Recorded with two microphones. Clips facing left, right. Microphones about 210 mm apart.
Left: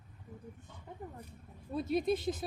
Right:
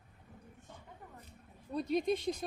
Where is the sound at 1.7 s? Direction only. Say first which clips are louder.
Left 1 dB; 5° left (ahead or behind).